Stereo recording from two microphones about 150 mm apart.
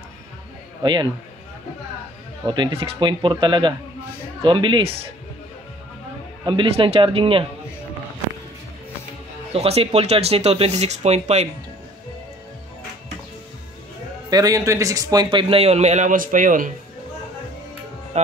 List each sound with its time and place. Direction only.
2.4 s a man's voice: 30° right (ahead or behind)
6.4 s a man's voice: 35° right (ahead or behind)
9.5 s speech: 40° right (ahead or behind)
14.3 s a man's voice: 25° right (ahead or behind); by 16.7 s 60° right (ahead or behind)
18.1 s speech: 45° right (ahead or behind)